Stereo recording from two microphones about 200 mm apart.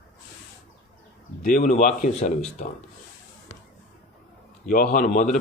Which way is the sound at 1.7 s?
35° left (ahead or behind).